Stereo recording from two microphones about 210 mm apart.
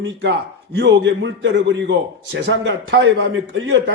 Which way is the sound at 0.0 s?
55° right (ahead or behind).